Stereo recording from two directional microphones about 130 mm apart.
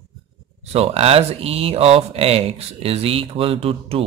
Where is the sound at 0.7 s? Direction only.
50° right (ahead or behind).